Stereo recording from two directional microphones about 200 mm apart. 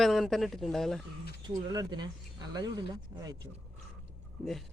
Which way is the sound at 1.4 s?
20° right (ahead or behind).